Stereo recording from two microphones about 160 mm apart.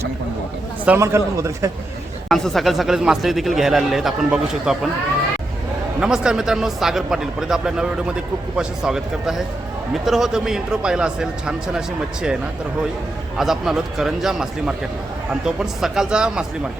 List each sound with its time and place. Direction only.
0.9 s a man's voice: 15° right (ahead or behind)
2.3 s speech: centre (ahead or behind)
6.0 s speech: 5° right (ahead or behind)
13.3 s speech: centre (ahead or behind)